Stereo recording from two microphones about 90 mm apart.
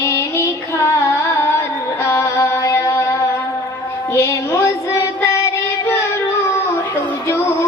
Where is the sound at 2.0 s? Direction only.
30° left (ahead or behind).